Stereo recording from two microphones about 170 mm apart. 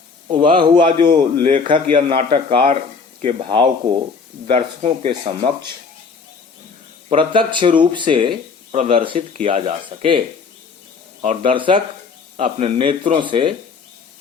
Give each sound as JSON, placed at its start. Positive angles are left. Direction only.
{"t": 0.3, "sound": "speech", "side_deg": -30}
{"t": 7.1, "sound": "speech", "side_deg": -30}
{"t": 11.4, "sound": "speech", "side_deg": -30}